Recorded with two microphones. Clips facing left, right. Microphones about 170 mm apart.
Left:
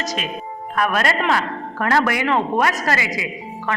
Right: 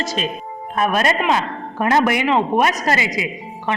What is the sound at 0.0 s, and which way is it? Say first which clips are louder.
A man's voice: right 2 dB; 30° right (ahead or behind).